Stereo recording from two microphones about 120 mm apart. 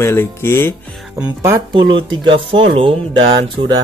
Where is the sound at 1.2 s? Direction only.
25° right (ahead or behind).